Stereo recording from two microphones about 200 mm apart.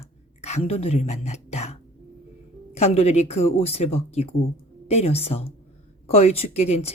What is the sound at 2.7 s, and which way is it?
Speech, 30° left (ahead or behind).